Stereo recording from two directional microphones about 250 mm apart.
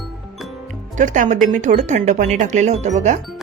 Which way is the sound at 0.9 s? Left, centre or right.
Right.